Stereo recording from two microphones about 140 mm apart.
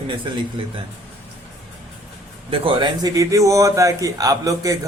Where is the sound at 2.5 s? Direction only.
35° right (ahead or behind).